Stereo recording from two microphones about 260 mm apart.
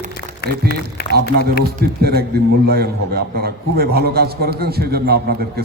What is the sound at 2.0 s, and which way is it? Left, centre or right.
A man's voice, right.